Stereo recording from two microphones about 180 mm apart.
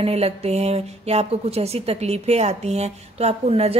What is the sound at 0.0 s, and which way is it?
Speech, 35° right (ahead or behind).